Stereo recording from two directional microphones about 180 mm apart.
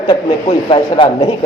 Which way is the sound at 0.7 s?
25° left (ahead or behind).